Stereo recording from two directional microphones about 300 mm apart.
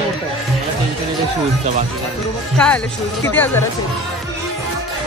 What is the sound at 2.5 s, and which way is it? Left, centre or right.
Speech, centre.